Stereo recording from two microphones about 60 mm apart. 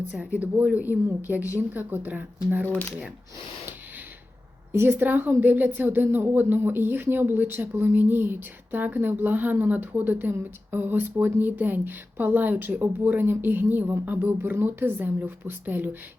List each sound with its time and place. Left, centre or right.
0.1 s a woman's voice: centre
4.7 s a woman's voice: right